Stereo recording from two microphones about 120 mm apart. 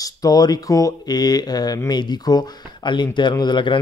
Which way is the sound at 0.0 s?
30° left (ahead or behind).